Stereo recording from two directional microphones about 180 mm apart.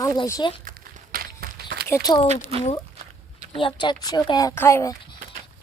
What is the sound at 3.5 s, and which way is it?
Speech, 25° left (ahead or behind).